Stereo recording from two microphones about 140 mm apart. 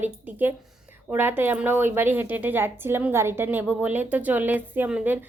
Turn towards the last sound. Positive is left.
turn(degrees=-10)  # may be behind; listen again after turning